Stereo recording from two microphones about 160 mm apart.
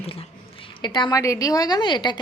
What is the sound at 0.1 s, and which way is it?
A woman's voice, 35° left (ahead or behind).